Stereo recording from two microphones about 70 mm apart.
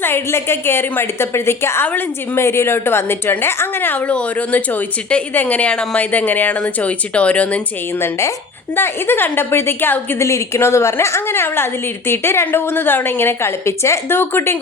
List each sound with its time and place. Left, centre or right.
0.0 s a woman's voice: left; by 7.6 s centre
7.9 s a woman's voice: left
10.2 s a woman's voice: left